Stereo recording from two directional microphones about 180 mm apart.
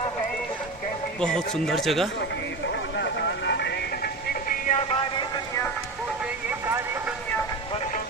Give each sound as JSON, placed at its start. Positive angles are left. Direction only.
{"t": 1.2, "sound": "speech", "side_deg": 5}
{"t": 3.0, "sound": "vehicle", "side_deg": 70}